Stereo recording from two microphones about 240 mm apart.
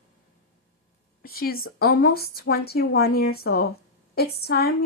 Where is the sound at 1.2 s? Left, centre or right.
Left.